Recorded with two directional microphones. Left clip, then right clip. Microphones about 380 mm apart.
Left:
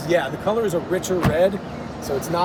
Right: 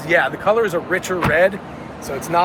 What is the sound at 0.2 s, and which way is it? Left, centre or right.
Speech, centre.